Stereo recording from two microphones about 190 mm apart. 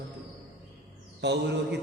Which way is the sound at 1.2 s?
65° right (ahead or behind).